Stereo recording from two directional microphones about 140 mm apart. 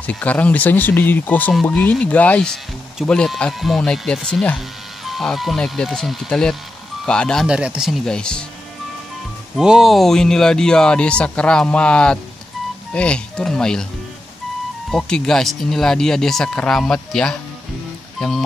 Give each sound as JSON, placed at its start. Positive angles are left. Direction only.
{"t": 0.0, "sound": "speech", "side_deg": 10}
{"t": 7.4, "sound": "speech", "side_deg": -5}
{"t": 9.6, "sound": "speech", "side_deg": -5}
{"t": 14.9, "sound": "speech", "side_deg": 5}